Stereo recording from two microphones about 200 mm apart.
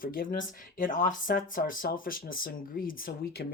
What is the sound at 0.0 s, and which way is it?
Speech, 45° left (ahead or behind).